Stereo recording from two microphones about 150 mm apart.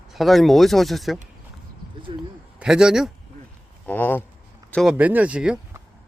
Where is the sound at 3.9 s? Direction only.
10° left (ahead or behind).